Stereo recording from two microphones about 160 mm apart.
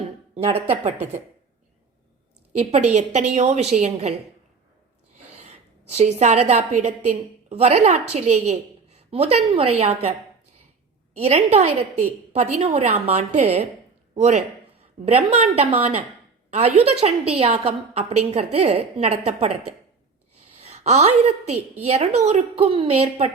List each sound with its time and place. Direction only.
0.3 s a woman's voice: 40° right (ahead or behind)
2.6 s a woman's voice: 45° right (ahead or behind)
5.9 s a woman's voice: 45° right (ahead or behind)
11.2 s a woman's voice: 40° right (ahead or behind)
20.6 s a woman's voice: 40° right (ahead or behind)